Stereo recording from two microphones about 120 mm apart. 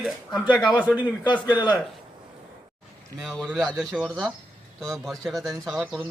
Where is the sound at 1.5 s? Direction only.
35° left (ahead or behind).